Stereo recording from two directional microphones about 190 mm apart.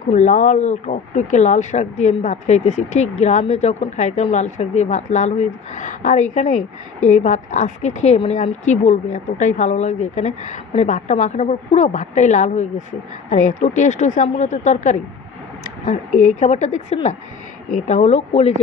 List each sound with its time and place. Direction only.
0.1 s speech: 40° left (ahead or behind)